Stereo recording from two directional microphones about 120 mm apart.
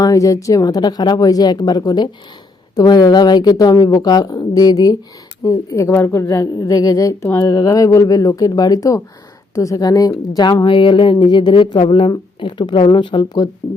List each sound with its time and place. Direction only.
0.0 s a woman's voice: 30° left (ahead or behind)